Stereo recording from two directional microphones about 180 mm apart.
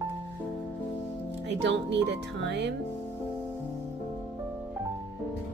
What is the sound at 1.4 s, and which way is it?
Speech, 75° right (ahead or behind).